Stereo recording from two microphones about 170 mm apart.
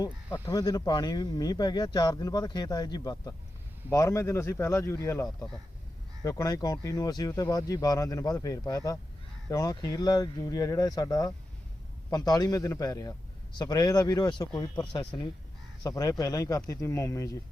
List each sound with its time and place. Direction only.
0.0 s speech: 20° left (ahead or behind)